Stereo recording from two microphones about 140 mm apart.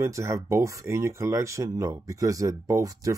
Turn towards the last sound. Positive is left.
turn(degrees=-25)  # may be behind; listen again after turning